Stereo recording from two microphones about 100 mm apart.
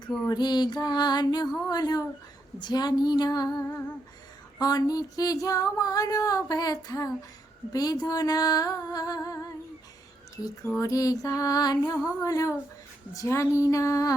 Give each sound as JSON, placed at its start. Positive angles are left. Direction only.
{"t": 0.3, "sound": "music", "side_deg": 45}
{"t": 1.7, "sound": "female singing", "side_deg": 40}
{"t": 2.6, "sound": "music", "side_deg": 45}
{"t": 4.6, "sound": "female singing", "side_deg": 40}
{"t": 10.8, "sound": "female singing", "side_deg": 35}